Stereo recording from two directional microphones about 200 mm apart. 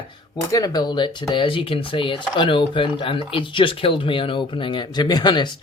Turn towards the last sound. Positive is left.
turn(degrees=20)  # may be behind; listen again after turning